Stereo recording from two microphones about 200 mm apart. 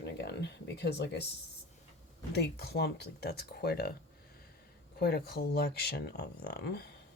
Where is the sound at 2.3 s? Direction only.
55° left (ahead or behind).